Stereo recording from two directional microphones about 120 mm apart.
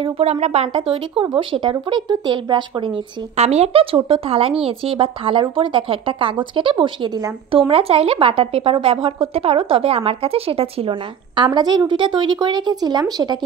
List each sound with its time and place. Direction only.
0.0 s a woman's voice: 60° right (ahead or behind); by 2.9 s 40° right (ahead or behind)
3.3 s a woman's voice: 65° right (ahead or behind); by 7.3 s 35° right (ahead or behind)
7.5 s a woman's voice: 50° right (ahead or behind); by 13.4 s 35° right (ahead or behind)